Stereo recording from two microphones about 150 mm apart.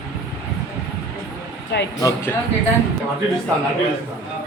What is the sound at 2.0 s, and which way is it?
Speech, 20° left (ahead or behind).